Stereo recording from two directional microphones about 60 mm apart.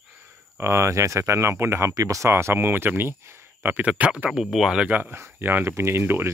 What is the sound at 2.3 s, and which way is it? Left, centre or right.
Speech, right.